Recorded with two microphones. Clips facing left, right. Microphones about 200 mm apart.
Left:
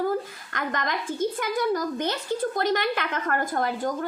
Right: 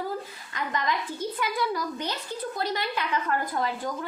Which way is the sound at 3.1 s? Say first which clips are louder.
Left 1 dB; 50° left (ahead or behind).